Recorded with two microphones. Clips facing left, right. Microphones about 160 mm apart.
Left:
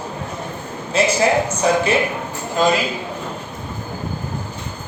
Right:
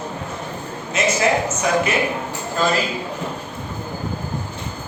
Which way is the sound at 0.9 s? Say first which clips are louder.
Left 3 dB; 30° left (ahead or behind).